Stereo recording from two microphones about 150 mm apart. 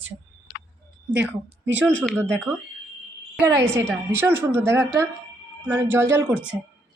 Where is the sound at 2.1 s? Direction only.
15° right (ahead or behind).